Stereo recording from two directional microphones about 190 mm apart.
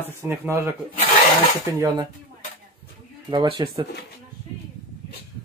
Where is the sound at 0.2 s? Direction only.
15° right (ahead or behind).